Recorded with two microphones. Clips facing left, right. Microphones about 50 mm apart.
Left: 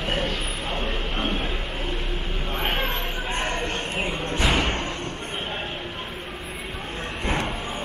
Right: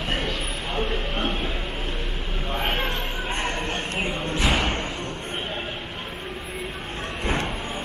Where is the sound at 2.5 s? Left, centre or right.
Centre.